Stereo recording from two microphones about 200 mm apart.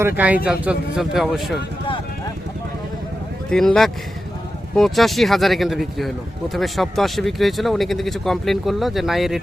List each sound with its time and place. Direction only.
0.2 s speech: 5° right (ahead or behind)
3.5 s speech: centre (ahead or behind)